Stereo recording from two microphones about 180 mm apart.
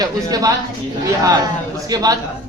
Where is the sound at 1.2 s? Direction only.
20° right (ahead or behind).